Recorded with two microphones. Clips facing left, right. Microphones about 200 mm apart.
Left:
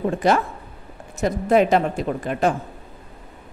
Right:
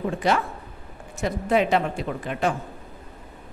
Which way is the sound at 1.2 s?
45° left (ahead or behind).